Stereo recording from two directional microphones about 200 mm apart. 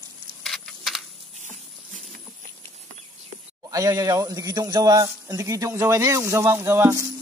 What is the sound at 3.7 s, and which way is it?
A man's voice, 15° right (ahead or behind).